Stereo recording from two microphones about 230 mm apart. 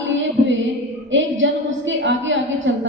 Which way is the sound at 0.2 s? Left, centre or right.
Right.